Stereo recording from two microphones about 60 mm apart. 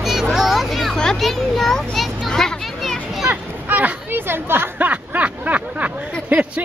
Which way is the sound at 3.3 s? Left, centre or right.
Right.